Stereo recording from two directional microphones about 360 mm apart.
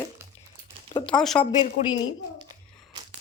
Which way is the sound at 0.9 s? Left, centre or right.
Centre.